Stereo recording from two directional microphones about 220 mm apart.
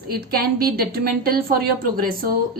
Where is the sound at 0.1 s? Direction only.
45° right (ahead or behind).